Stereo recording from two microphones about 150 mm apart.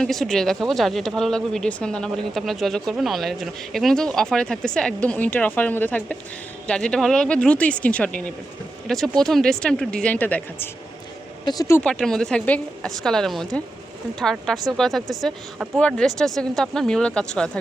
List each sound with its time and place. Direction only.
0.0 s speech: 5° left (ahead or behind)
11.4 s speech: 25° left (ahead or behind)
11.8 s speech: 5° left (ahead or behind)
15.8 s speech: 5° left (ahead or behind)